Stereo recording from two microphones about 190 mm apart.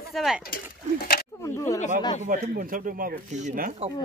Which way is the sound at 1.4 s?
15° left (ahead or behind).